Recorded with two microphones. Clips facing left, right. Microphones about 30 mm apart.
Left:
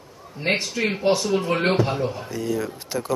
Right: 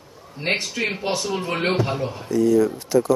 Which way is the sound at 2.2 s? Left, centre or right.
Centre.